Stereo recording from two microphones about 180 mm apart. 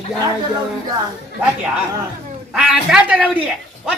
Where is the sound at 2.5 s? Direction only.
5° right (ahead or behind).